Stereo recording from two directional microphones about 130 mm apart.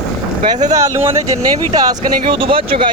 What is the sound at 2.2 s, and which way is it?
Speech, 40° right (ahead or behind).